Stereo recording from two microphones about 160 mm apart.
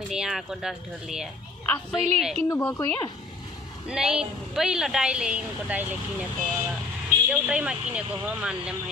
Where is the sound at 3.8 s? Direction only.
5° right (ahead or behind).